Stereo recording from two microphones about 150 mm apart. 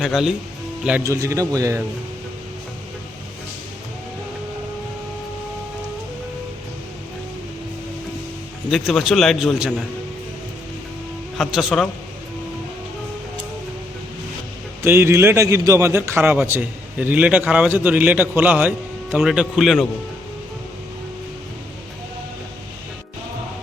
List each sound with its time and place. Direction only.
0.0 s a man's voice: 5° right (ahead or behind)
1.0 s speech: 20° right (ahead or behind)
8.7 s a man's voice: centre (ahead or behind)
11.3 s a man's voice: centre (ahead or behind)
14.8 s a man's voice: 15° right (ahead or behind); by 19.9 s centre (ahead or behind)